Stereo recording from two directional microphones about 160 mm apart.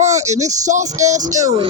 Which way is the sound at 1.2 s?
20° right (ahead or behind).